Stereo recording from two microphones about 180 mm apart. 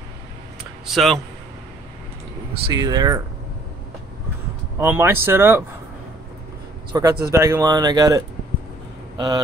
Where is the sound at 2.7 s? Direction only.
20° right (ahead or behind).